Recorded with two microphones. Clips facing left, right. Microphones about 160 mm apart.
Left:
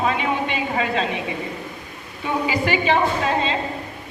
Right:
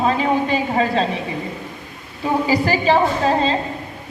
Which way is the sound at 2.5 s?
35° right (ahead or behind).